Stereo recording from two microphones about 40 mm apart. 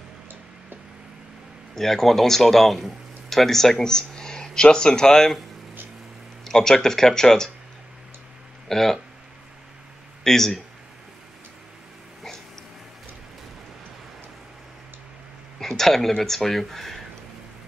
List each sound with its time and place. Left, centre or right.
1.8 s speech: centre
3.7 s speech: left
6.4 s speech: centre
8.6 s speech: centre
10.2 s speech: centre
15.6 s speech: centre